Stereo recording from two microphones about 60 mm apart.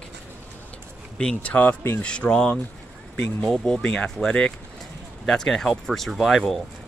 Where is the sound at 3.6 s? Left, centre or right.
Centre.